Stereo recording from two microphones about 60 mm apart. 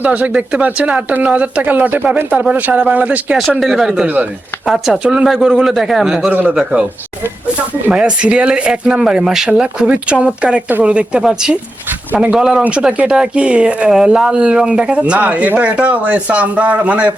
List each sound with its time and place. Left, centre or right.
0.0 s speech: right
3.6 s speech: centre
4.0 s speech: right
4.9 s speech: centre
5.2 s speech: centre
6.3 s speech: right
7.9 s speech: centre
10.7 s speech: right
11.2 s speech: centre
12.1 s speech: right
12.4 s speech: centre